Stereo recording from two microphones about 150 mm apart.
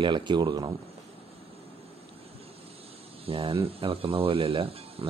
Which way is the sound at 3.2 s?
40° right (ahead or behind).